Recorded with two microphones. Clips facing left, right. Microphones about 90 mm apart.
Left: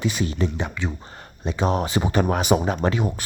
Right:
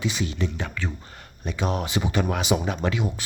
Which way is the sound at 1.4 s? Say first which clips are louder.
Left 4 dB; 35° left (ahead or behind).